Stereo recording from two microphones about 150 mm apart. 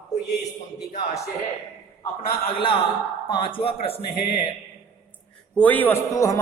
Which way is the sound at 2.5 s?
35° left (ahead or behind).